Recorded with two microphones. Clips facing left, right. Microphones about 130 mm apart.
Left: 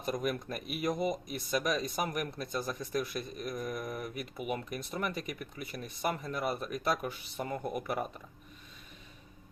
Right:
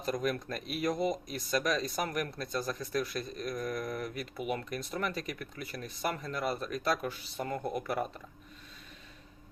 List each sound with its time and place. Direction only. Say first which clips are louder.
0.1 s speech: right 1 dB; 10° left (ahead or behind)
3.8 s speech: right 2 dB; 15° left (ahead or behind)